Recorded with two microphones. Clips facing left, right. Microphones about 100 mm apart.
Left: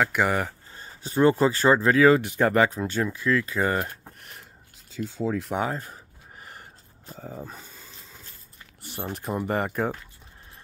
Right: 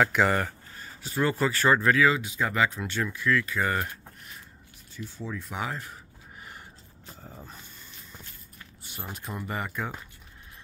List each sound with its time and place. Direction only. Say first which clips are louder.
0.0 s speech: even; 5° left (ahead or behind)
0.7 s speech: left 6 dB; 35° left (ahead or behind)
2.0 s speech: left 7 dB; 55° left (ahead or behind); by 3.8 s 30° left (ahead or behind)
3.9 s a sound: left 1 dB; 50° left (ahead or behind)
4.9 s speech: left 9 dB; 85° left
5.5 s speech: left 6 dB; 40° left (ahead or behind)
9.5 s speech: left 7 dB; 45° left (ahead or behind)